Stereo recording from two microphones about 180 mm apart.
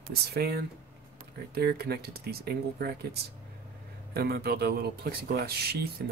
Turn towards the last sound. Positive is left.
turn(degrees=-60)  # may be behind; listen again after turning